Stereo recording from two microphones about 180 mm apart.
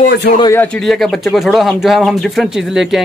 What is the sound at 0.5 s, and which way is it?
Speech, 5° left (ahead or behind).